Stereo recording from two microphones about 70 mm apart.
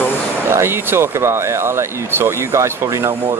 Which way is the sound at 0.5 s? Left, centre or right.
Right.